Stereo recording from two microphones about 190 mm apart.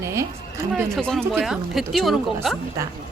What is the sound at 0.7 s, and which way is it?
Speech, centre (ahead or behind).